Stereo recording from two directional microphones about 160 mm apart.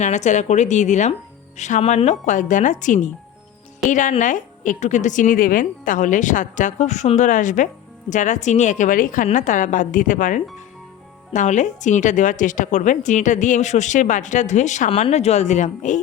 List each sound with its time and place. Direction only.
0.0 s a woman's voice: 45° left (ahead or behind)